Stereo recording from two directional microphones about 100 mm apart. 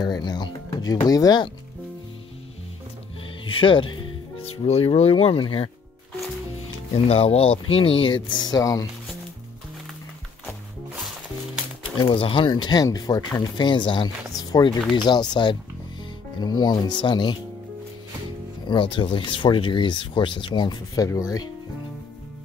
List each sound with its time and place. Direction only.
0.0 s speech: 45° left (ahead or behind)
1.0 s speech: 40° left (ahead or behind)
3.4 s music: 55° left (ahead or behind)
4.6 s speech: 90° left; by 5.7 s 65° left (ahead or behind)
7.1 s speech: 75° left (ahead or behind); by 8.8 s 35° left (ahead or behind)
12.0 s speech: 60° left (ahead or behind); by 13.2 s 40° left (ahead or behind)
13.4 s speech: 50° left (ahead or behind)
18.7 s speech: 55° left (ahead or behind)
20.9 s speech: 35° left (ahead or behind)